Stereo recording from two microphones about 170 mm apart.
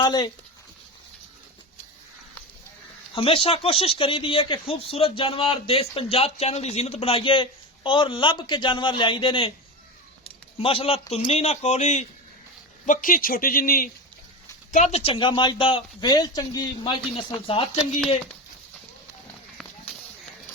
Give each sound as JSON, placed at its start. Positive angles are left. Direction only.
{"t": 0.0, "sound": "speech", "side_deg": 25}
{"t": 3.2, "sound": "speech", "side_deg": 35}
{"t": 14.7, "sound": "speech", "side_deg": 40}